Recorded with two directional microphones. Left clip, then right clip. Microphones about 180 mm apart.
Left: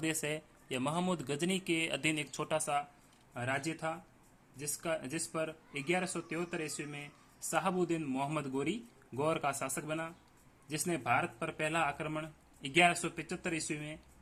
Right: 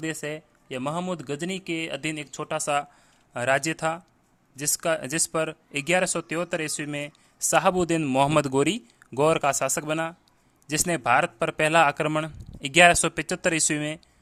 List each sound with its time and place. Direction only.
0.0 s speech: 25° right (ahead or behind)
3.3 s speech: 50° right (ahead or behind)